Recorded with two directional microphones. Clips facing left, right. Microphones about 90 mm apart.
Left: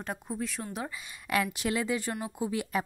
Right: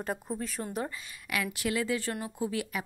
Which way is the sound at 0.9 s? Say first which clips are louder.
Even; 15° left (ahead or behind).